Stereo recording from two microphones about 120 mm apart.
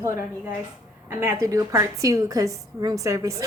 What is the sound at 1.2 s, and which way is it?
A woman's voice, 25° right (ahead or behind).